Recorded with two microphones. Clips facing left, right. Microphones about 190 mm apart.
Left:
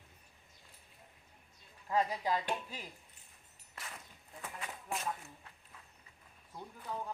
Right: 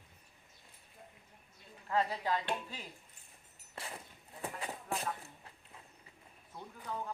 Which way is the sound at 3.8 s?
30° right (ahead or behind).